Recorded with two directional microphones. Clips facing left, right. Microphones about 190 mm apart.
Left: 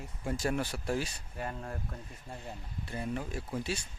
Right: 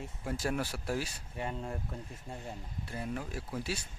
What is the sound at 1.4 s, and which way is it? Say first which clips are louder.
Speech: right 1 dB; 20° right (ahead or behind).